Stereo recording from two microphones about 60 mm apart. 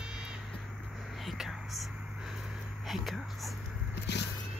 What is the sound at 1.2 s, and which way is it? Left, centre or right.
Whispering, centre.